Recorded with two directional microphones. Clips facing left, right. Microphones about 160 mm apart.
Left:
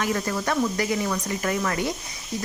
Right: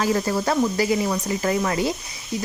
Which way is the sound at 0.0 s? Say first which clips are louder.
Right 4 dB; 30° right (ahead or behind).